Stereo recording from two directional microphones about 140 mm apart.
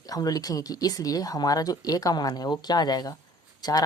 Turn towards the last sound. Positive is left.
turn(degrees=30)  # may be behind; listen again after turning